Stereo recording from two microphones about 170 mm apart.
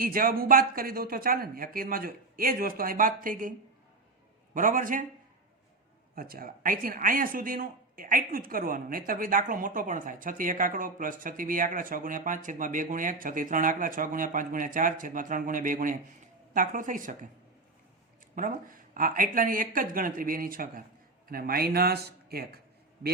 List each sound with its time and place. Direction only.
0.0 s speech: 55° right (ahead or behind)
4.5 s speech: 55° right (ahead or behind)
6.1 s speech: 60° right (ahead or behind)
18.4 s speech: 50° right (ahead or behind)